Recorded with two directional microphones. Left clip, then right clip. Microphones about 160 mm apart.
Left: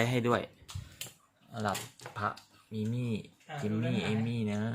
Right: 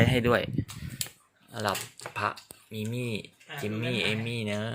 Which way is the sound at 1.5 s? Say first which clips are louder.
Right 4 dB; 35° right (ahead or behind).